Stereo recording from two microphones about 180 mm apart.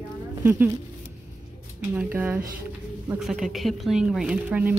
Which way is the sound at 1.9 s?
5° right (ahead or behind).